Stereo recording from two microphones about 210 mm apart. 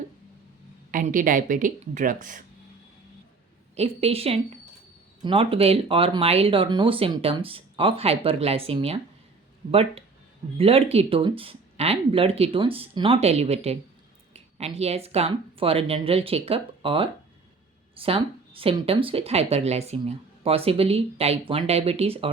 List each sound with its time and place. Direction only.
0.9 s speech: 40° right (ahead or behind)
3.8 s speech: 30° right (ahead or behind)
10.6 s speech: 30° right (ahead or behind)